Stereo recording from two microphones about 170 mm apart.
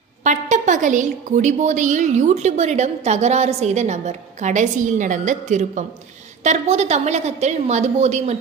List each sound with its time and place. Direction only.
0.3 s a woman's voice: 45° right (ahead or behind)